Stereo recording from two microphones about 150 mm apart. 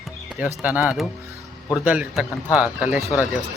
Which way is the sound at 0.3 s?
10° right (ahead or behind).